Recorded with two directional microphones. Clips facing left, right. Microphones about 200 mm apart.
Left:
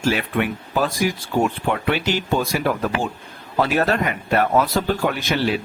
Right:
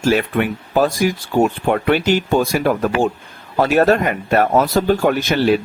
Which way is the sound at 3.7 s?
45° right (ahead or behind).